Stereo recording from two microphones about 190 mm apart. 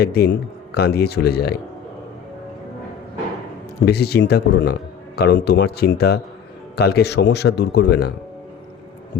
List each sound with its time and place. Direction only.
0.0 s a man's voice: 55° left (ahead or behind)
3.8 s a man's voice: 60° left (ahead or behind)